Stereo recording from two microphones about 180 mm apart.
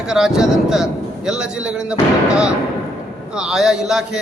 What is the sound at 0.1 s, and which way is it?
A man's voice, 5° right (ahead or behind).